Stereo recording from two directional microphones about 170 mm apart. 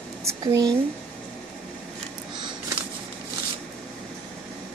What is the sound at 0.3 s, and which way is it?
Speech, 20° right (ahead or behind).